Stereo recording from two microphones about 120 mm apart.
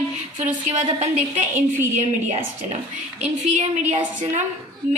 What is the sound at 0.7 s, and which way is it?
Speech, 60° right (ahead or behind).